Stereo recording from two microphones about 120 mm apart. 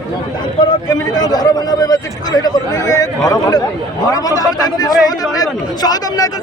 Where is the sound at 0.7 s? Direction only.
35° left (ahead or behind).